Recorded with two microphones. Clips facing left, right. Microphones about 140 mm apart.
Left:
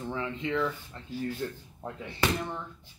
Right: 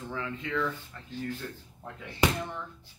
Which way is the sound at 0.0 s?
25° left (ahead or behind).